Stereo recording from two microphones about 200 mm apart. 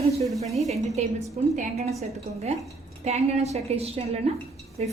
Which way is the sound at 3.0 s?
30° right (ahead or behind).